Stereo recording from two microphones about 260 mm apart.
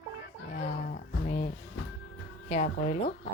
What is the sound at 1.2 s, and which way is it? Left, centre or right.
Music, left.